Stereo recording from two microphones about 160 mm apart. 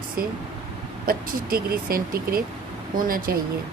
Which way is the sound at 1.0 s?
70° right (ahead or behind).